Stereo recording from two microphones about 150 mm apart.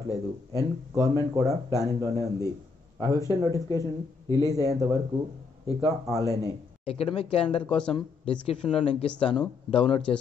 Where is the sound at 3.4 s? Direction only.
25° right (ahead or behind).